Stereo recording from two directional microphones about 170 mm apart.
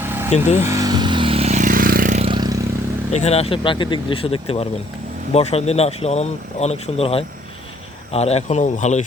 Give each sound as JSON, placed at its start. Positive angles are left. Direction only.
{"t": 0.0, "sound": "vehicle", "side_deg": -10}
{"t": 0.3, "sound": "speech", "side_deg": 40}
{"t": 0.6, "sound": "vehicle", "side_deg": -20}
{"t": 2.2, "sound": "vehicle", "side_deg": -25}
{"t": 3.1, "sound": "speech", "side_deg": 40}